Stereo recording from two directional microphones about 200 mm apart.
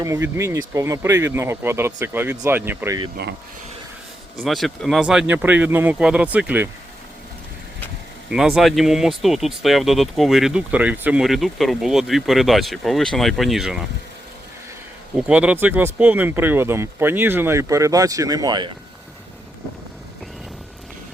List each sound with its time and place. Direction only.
0.0 s speech: 15° right (ahead or behind)
3.2 s speech: 50° right (ahead or behind)
4.4 s speech: centre (ahead or behind)
8.3 s speech: centre (ahead or behind)
15.1 s speech: 5° right (ahead or behind)